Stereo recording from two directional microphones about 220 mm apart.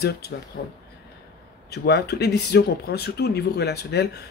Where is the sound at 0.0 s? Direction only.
45° left (ahead or behind).